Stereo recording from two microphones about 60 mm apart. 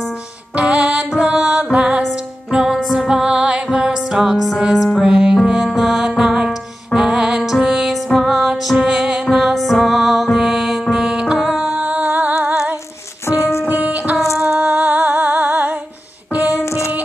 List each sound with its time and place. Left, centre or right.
0.6 s music: centre
2.5 s music: centre; by 12.5 s right
13.7 s music: right
16.6 s music: left